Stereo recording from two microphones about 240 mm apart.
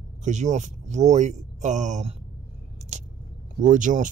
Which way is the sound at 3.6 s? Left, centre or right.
Right.